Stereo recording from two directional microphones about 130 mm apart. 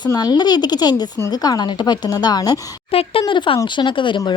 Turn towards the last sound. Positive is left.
turn(degrees=40)  # may be behind; listen again after turning